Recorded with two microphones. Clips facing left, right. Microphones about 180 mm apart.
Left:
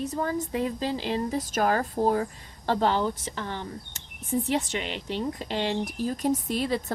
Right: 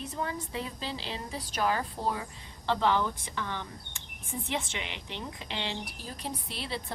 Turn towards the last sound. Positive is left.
turn(degrees=45)  # may be behind; listen again after turning